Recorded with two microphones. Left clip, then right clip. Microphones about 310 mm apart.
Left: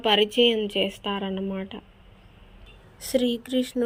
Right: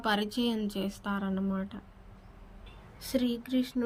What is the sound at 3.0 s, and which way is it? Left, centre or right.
Speech, centre.